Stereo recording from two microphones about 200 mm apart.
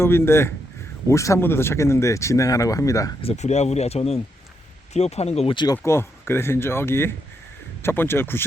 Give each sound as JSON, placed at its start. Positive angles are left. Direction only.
{"t": 0.0, "sound": "speech", "side_deg": 10}
{"t": 3.2, "sound": "speech", "side_deg": 30}
{"t": 5.7, "sound": "speech", "side_deg": 10}